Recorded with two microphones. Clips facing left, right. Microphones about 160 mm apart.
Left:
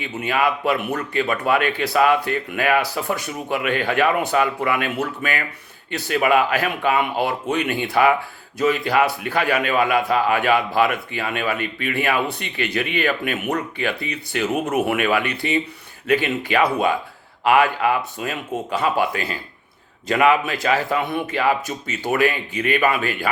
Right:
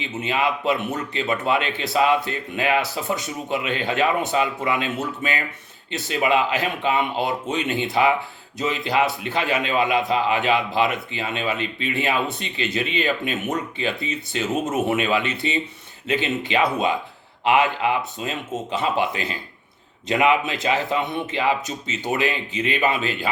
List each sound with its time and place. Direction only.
0.2 s a man's voice: 20° right (ahead or behind)